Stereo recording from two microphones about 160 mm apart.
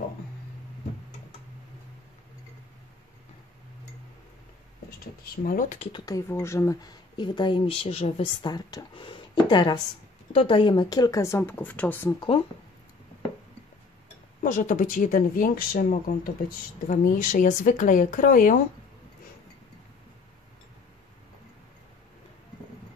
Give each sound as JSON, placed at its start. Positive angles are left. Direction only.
{"t": 5.2, "sound": "speech", "side_deg": 65}
{"t": 5.8, "sound": "speech", "side_deg": 30}
{"t": 12.1, "sound": "speech", "side_deg": 30}
{"t": 14.4, "sound": "speech", "side_deg": 55}